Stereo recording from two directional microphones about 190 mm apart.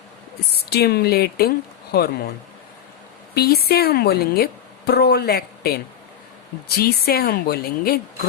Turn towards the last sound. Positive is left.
turn(degrees=55)  # may be behind; listen again after turning